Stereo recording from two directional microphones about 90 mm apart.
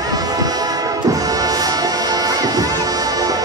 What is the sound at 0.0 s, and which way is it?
Music, 45° right (ahead or behind).